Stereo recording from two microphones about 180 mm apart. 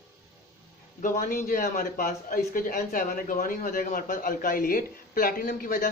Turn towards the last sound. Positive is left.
turn(degrees=50)  # may be behind; listen again after turning